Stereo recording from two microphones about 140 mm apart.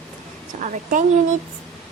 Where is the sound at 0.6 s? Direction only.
65° right (ahead or behind).